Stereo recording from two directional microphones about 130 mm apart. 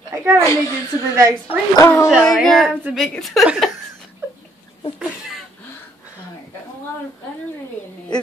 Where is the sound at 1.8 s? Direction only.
25° left (ahead or behind).